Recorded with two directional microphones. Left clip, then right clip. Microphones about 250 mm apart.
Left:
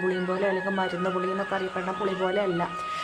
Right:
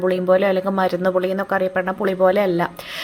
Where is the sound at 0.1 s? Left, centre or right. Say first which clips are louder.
Right 10 dB; right.